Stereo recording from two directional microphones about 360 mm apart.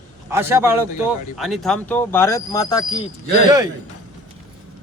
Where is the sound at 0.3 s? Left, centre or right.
Centre.